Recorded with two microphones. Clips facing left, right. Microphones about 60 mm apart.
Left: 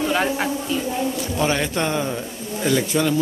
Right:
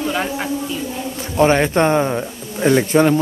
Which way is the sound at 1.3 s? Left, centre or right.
Right.